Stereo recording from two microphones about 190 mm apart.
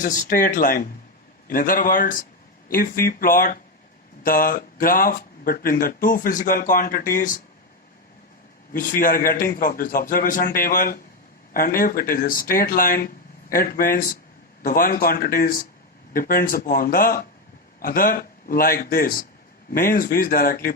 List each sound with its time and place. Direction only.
0.0 s speech: 45° left (ahead or behind)
8.7 s speech: 45° left (ahead or behind)